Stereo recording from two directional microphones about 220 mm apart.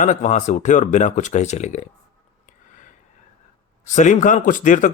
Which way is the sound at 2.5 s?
35° left (ahead or behind).